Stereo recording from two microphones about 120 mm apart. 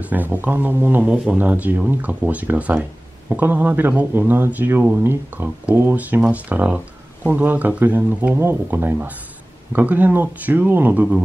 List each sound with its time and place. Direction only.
0.0 s speech: 15° right (ahead or behind)